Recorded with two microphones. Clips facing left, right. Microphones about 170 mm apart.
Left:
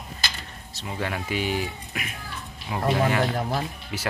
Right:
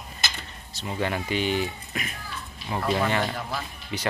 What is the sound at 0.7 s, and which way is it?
Speech, centre (ahead or behind).